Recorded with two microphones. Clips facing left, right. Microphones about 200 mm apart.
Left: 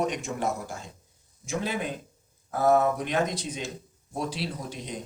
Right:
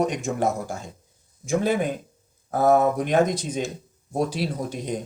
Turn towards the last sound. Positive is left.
turn(degrees=-50)  # may be behind; listen again after turning